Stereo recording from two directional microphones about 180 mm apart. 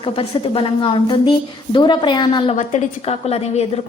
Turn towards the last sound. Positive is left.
turn(degrees=35)  # may be behind; listen again after turning